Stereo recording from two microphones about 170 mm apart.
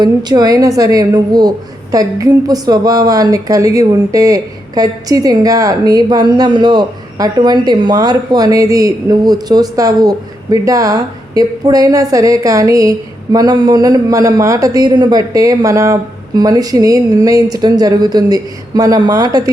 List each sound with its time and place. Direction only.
0.0 s a woman's voice: 25° right (ahead or behind)